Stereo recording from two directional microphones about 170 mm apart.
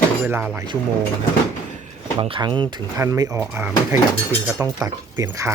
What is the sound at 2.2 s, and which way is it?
Speech, 30° right (ahead or behind).